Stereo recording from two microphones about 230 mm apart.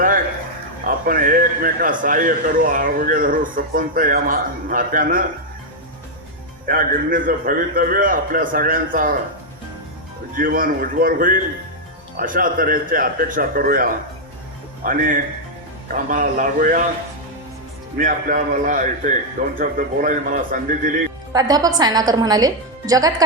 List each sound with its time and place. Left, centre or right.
0.9 s a man's voice: right
6.7 s a man's voice: right
10.3 s a man's voice: right
17.9 s a man's voice: right
21.3 s a woman's voice: centre